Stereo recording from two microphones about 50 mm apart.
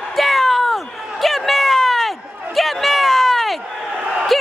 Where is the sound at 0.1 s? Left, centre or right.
Centre.